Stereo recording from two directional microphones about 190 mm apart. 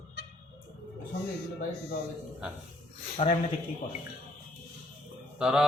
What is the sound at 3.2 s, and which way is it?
Speech, 35° left (ahead or behind).